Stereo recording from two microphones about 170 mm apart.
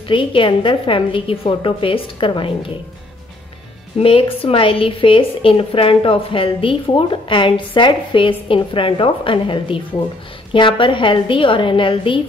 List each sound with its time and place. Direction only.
0.1 s a woman's voice: 30° left (ahead or behind)
4.0 s a woman's voice: 35° left (ahead or behind)